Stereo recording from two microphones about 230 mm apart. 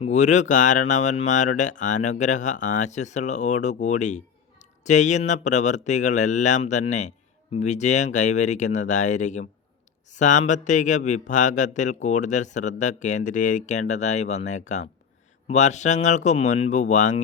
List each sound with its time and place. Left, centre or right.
0.0 s speech: left